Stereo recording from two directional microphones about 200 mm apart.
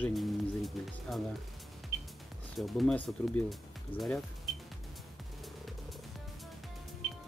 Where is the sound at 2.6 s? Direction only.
Centre (ahead or behind).